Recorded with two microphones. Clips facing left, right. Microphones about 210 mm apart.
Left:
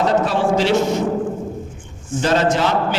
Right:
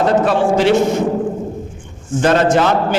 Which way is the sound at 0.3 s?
55° right (ahead or behind).